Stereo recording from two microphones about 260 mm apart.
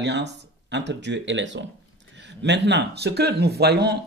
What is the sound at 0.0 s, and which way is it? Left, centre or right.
Speech, right.